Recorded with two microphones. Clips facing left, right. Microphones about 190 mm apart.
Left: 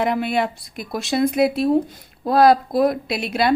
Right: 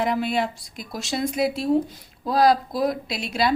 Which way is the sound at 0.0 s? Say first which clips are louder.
Left 3 dB; 60° left (ahead or behind).